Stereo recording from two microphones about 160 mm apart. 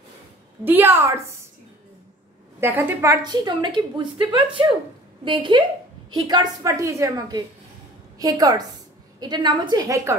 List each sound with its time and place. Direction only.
0.7 s a woman's voice: 15° right (ahead or behind)
2.6 s a woman's voice: 10° right (ahead or behind)